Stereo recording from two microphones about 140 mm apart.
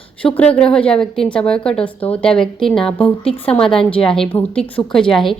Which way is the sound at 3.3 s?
45° left (ahead or behind).